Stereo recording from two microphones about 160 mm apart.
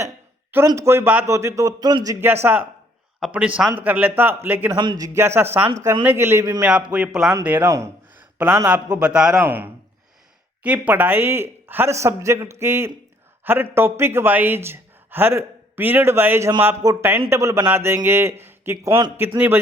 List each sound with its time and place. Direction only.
0.7 s speech: 15° right (ahead or behind)
2.2 s a man's voice: 15° right (ahead or behind)
4.8 s speech: 25° right (ahead or behind)
6.6 s a man's voice: 5° right (ahead or behind)